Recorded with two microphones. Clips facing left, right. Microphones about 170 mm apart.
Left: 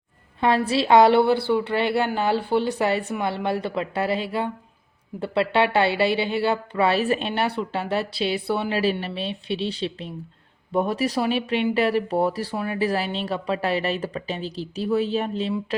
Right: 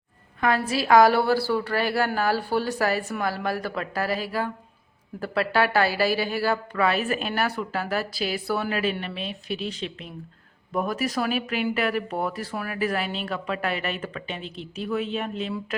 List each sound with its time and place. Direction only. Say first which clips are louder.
0.3 s a woman's voice: left 3 dB; 30° left (ahead or behind)